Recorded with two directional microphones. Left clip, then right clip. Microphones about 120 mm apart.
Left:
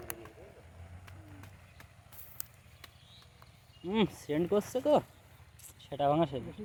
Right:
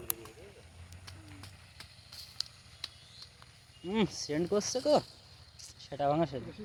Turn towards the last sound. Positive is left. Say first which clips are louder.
# left 1 dB
turn(degrees=10)  # may be behind; listen again after turning